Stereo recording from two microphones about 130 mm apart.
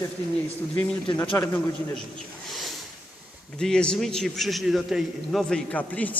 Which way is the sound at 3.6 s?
5° left (ahead or behind).